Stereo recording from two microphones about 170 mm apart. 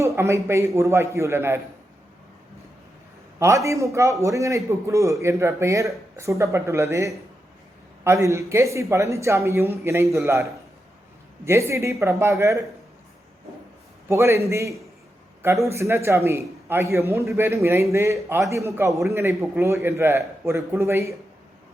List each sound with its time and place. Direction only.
0.0 s speech: 15° right (ahead or behind)
3.3 s speech: 15° right (ahead or behind)
11.4 s speech: 15° right (ahead or behind)
14.1 s speech: 15° right (ahead or behind)